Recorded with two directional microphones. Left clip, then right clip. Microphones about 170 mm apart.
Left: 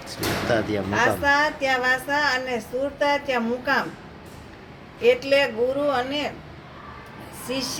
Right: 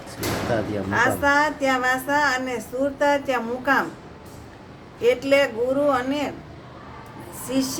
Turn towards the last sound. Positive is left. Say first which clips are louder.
# right 3 dB
turn(degrees=-20)  # may be behind; listen again after turning